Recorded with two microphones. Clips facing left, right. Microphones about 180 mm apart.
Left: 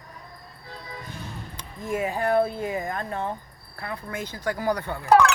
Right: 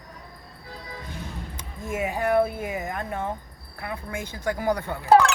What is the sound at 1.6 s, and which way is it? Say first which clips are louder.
Speech: left 2 dB; 20° right (ahead or behind).